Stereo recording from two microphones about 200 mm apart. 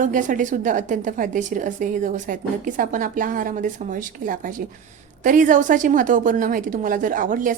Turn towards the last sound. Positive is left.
turn(degrees=-40)  # may be behind; listen again after turning